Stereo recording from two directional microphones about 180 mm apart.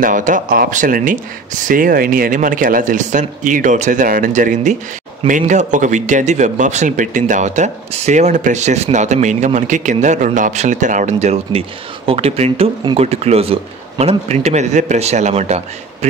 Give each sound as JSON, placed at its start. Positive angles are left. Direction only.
{"t": 0.0, "sound": "a man's voice", "side_deg": -45}